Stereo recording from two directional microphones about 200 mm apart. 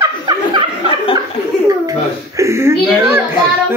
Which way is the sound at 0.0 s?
20° right (ahead or behind).